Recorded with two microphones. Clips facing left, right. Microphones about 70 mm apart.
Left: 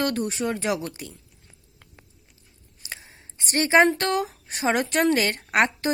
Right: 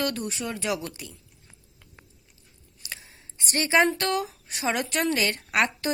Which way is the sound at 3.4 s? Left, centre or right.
Left.